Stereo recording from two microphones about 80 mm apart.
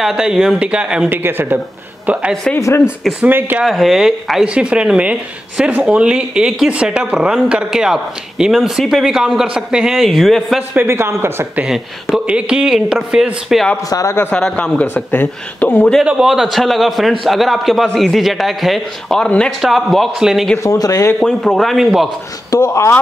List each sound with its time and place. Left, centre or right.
0.0 s speech: centre
1.0 s speech: right
3.3 s speech: right
3.6 s a man's voice: centre
10.8 s a man's voice: right
11.6 s a man's voice: centre
13.8 s speech: left
14.3 s speech: centre
16.0 s a man's voice: centre
19.6 s a man's voice: centre
20.5 s speech: left
21.2 s a man's voice: centre
22.5 s speech: left